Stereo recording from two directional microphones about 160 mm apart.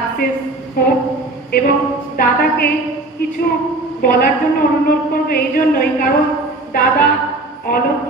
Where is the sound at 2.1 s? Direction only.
65° left (ahead or behind).